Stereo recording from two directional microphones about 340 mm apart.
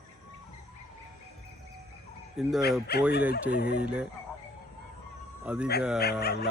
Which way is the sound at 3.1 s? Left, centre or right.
Left.